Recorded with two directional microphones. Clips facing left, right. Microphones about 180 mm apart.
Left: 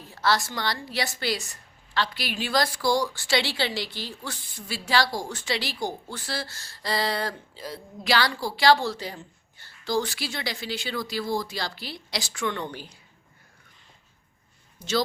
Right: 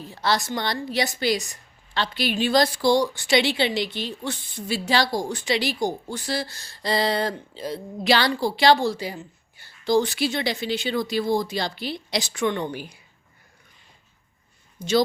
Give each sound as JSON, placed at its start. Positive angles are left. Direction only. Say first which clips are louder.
{"t": 0.1, "sound": "a woman's voice", "louder": "right 1 dB", "side_deg": -20}
{"t": 14.8, "sound": "speech", "louder": "right 6 dB", "side_deg": -15}